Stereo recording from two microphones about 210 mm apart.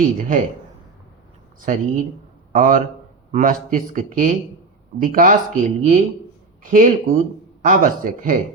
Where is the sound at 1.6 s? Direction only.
40° right (ahead or behind).